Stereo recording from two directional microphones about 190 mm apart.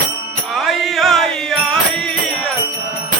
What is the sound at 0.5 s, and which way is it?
Music, centre (ahead or behind).